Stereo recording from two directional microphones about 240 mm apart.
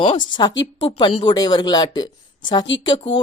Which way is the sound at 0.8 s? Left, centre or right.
Centre.